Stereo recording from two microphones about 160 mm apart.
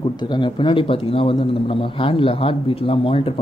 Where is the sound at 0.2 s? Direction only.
30° left (ahead or behind).